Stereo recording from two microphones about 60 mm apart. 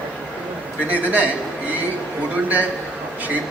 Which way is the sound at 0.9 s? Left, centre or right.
Right.